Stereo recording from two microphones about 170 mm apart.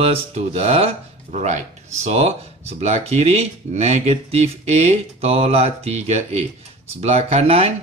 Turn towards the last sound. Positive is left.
turn(degrees=-35)  # may be behind; listen again after turning